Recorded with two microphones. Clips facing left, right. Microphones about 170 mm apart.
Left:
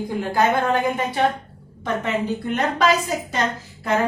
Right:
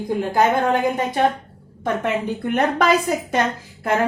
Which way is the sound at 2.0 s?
55° right (ahead or behind).